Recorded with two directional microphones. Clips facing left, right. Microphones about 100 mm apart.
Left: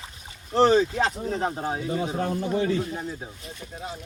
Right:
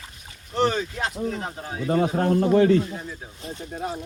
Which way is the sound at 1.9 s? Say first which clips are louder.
Right 10 dB; 60° right (ahead or behind).